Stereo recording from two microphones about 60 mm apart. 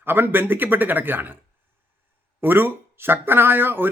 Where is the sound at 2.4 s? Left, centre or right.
Right.